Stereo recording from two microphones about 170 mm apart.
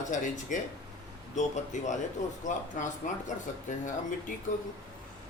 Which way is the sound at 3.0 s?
50° left (ahead or behind).